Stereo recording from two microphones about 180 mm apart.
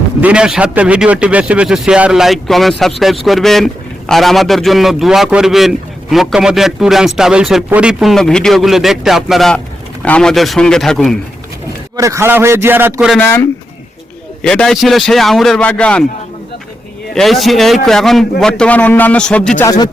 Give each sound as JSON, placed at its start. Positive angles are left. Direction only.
{"t": 0.2, "sound": "a man's voice", "side_deg": -5}
{"t": 11.9, "sound": "a man's voice", "side_deg": -15}
{"t": 13.1, "sound": "speech", "side_deg": 15}
{"t": 14.4, "sound": "a man's voice", "side_deg": 5}
{"t": 17.2, "sound": "a man's voice", "side_deg": 0}
{"t": 19.6, "sound": "speech", "side_deg": 20}